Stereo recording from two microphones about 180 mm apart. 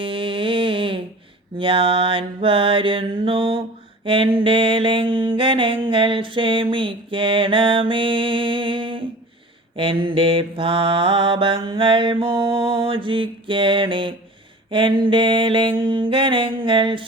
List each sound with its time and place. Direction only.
0.0 s humming: 30° right (ahead or behind)
1.5 s mantra: 30° right (ahead or behind)